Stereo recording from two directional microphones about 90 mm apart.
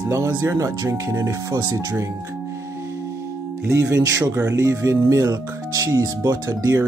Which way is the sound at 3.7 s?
35° right (ahead or behind).